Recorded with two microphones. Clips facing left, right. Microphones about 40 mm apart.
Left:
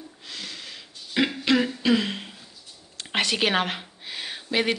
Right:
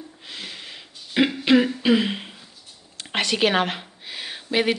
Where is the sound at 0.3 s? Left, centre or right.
Centre.